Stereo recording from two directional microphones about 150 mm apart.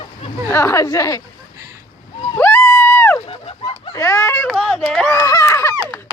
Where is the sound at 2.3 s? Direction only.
15° left (ahead or behind).